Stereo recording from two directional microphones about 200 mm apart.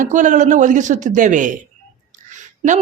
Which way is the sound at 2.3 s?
40° right (ahead or behind).